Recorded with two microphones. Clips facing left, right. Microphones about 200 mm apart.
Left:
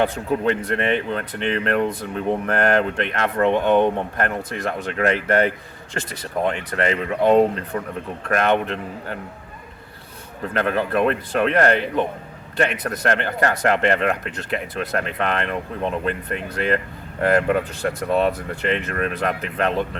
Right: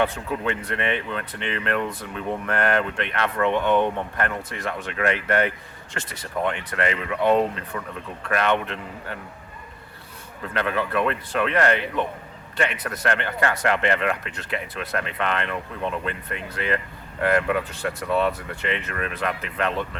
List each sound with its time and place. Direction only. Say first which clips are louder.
0.0 s speech: left 4 dB; 40° left (ahead or behind)
10.4 s speech: left 4 dB; 40° left (ahead or behind)